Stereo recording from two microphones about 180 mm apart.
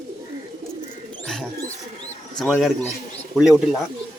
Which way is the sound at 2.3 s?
Centre (ahead or behind).